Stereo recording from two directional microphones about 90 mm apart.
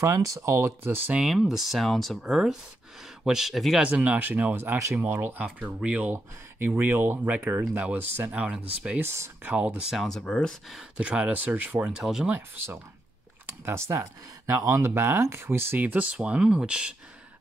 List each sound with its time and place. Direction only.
0.0 s speech: 35° right (ahead or behind)
1.2 s speech: 5° right (ahead or behind)
3.8 s speech: 15° right (ahead or behind)
9.0 s speech: 30° right (ahead or behind)
9.5 s speech: 15° right (ahead or behind); by 10.8 s 5° left (ahead or behind)
10.8 s speech: 15° right (ahead or behind)
11.9 s speech: 5° right (ahead or behind)
12.3 s speech: 25° right (ahead or behind); by 16.9 s 10° right (ahead or behind)